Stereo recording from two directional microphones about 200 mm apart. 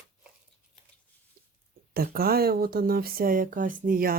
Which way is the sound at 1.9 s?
50° right (ahead or behind).